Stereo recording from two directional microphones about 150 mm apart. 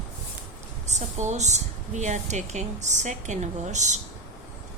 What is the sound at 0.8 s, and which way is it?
A woman's voice, 50° right (ahead or behind).